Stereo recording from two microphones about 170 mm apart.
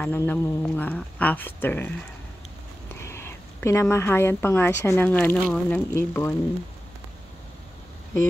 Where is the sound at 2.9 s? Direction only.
15° left (ahead or behind).